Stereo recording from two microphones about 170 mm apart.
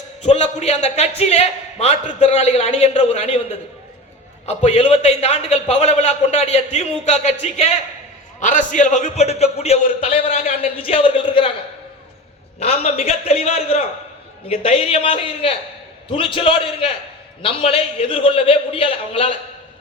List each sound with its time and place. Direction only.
0.2 s a man's voice: 40° left (ahead or behind)
12.5 s a man's voice: 40° left (ahead or behind)